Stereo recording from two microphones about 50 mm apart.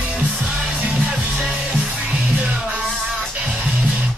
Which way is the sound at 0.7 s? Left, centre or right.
Right.